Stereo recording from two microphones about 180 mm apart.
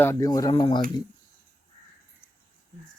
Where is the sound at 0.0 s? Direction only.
15° left (ahead or behind).